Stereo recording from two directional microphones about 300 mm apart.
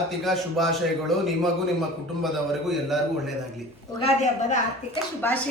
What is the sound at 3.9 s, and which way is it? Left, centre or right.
Speech, left.